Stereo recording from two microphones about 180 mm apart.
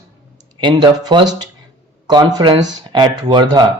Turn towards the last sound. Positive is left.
turn(degrees=-25)  # may be behind; listen again after turning